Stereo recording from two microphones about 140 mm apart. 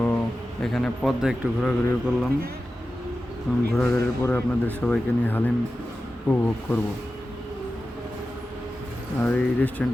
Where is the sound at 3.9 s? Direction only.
15° left (ahead or behind).